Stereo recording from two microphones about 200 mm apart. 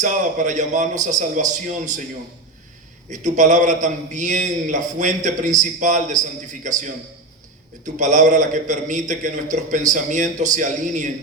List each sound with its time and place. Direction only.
0.0 s a man's voice: 40° right (ahead or behind)
3.1 s a man's voice: 40° right (ahead or behind)